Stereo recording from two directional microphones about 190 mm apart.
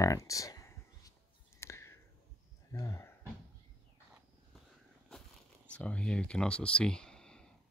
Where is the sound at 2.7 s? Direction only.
15° left (ahead or behind).